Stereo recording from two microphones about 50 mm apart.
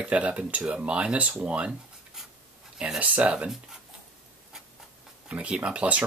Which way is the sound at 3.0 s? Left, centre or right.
Right.